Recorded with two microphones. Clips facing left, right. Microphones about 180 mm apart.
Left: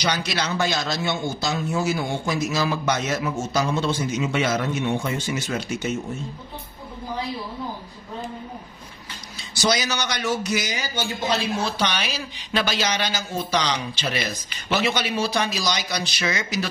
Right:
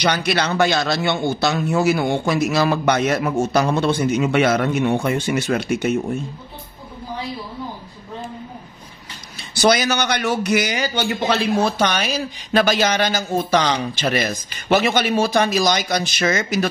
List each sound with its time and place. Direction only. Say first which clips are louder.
0.0 s speech: right 5 dB; 60° right (ahead or behind)
9.4 s a man's voice: right 6 dB; 60° right (ahead or behind)